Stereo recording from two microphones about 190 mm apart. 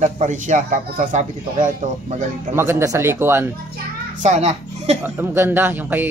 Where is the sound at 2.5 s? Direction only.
15° right (ahead or behind).